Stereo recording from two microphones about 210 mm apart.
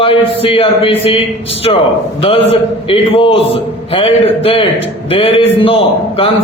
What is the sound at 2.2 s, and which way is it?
A man's voice, 30° left (ahead or behind).